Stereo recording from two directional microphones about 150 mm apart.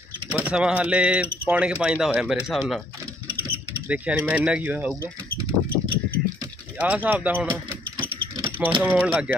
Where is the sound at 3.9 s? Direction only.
5° right (ahead or behind).